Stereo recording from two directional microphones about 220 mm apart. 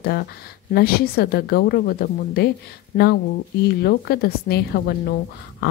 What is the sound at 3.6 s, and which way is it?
Speech, 45° left (ahead or behind).